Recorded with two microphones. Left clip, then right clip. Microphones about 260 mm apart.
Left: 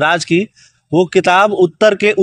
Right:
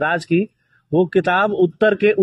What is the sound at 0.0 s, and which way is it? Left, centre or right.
Speech, left.